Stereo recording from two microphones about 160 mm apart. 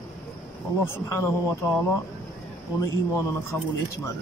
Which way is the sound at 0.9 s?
20° left (ahead or behind).